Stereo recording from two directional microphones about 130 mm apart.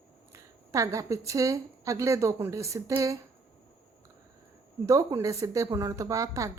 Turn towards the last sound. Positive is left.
turn(degrees=-25)  # may be behind; listen again after turning